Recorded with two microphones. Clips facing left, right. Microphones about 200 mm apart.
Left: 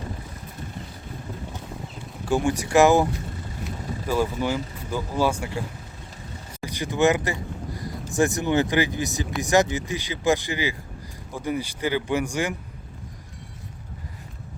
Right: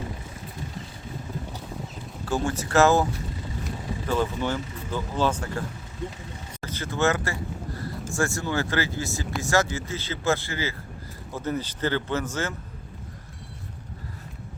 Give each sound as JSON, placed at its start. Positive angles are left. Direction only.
{"t": 2.2, "sound": "speech", "side_deg": 15}
{"t": 6.6, "sound": "a sound", "side_deg": 15}
{"t": 8.1, "sound": "speech", "side_deg": 20}